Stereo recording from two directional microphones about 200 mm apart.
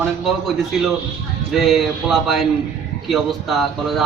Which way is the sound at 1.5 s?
Centre (ahead or behind).